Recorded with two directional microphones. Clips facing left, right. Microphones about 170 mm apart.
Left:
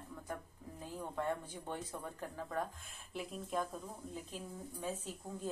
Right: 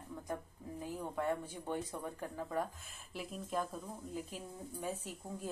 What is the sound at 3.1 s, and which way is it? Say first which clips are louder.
Speech: even; centre (ahead or behind).